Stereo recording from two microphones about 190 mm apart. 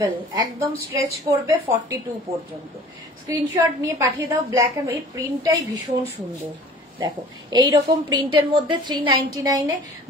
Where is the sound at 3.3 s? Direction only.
20° right (ahead or behind).